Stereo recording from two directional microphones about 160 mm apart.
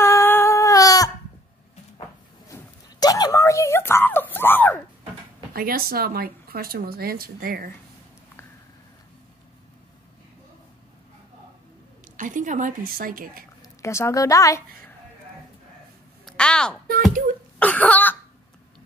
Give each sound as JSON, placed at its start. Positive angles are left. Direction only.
{"t": 0.0, "sound": "humming", "side_deg": 15}
{"t": 2.4, "sound": "a sound", "side_deg": 20}
{"t": 5.5, "sound": "a woman's voice", "side_deg": -70}
{"t": 12.2, "sound": "a woman's voice", "side_deg": -55}
{"t": 13.6, "sound": "a woman's voice", "side_deg": 15}
{"t": 16.3, "sound": "a sound", "side_deg": 5}